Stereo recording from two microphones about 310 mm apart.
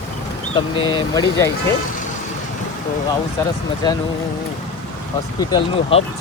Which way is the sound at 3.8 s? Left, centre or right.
Centre.